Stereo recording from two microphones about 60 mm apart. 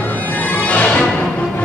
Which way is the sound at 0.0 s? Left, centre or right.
Left.